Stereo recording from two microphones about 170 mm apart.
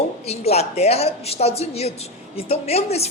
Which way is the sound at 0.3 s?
40° left (ahead or behind).